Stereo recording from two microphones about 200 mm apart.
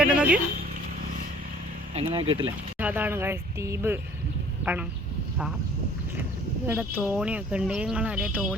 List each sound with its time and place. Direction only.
0.0 s a sound: 5° right (ahead or behind)
2.0 s speech: 25° right (ahead or behind)
2.7 s speech: 10° right (ahead or behind)
6.7 s speech: 10° right (ahead or behind)